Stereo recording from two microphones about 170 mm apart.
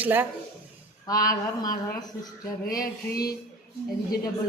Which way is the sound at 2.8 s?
60° left (ahead or behind).